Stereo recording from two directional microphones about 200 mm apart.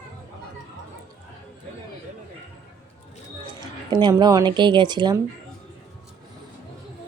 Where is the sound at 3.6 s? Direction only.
20° right (ahead or behind).